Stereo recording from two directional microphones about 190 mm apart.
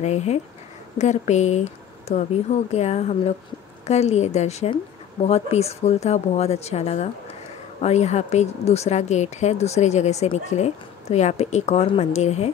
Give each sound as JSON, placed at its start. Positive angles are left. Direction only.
{"t": 0.0, "sound": "speech", "side_deg": 35}